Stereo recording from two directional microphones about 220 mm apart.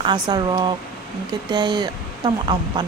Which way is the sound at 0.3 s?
20° right (ahead or behind).